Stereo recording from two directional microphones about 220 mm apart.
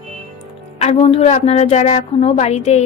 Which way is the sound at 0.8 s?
25° left (ahead or behind).